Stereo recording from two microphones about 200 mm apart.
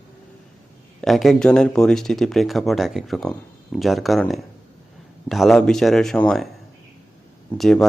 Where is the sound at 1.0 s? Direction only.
Centre (ahead or behind).